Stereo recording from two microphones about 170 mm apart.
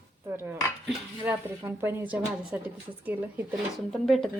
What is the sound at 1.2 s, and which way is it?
Speech, 10° right (ahead or behind).